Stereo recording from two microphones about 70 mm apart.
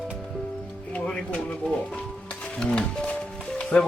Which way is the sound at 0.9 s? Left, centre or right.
Centre.